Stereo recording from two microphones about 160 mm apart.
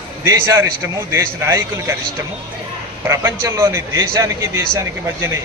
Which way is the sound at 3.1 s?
20° right (ahead or behind).